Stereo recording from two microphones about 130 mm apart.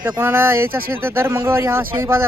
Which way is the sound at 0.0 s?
15° right (ahead or behind).